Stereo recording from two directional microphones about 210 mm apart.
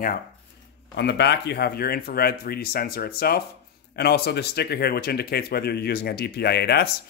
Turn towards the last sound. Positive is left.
turn(degrees=50)  # may be behind; listen again after turning